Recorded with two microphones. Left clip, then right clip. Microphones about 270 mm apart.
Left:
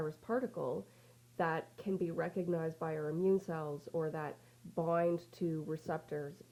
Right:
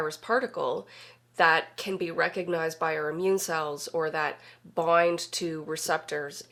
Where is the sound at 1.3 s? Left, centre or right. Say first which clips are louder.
Right 14 dB; centre.